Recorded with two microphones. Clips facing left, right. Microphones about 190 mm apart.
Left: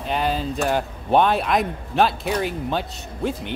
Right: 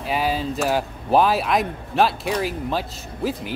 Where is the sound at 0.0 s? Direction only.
5° right (ahead or behind).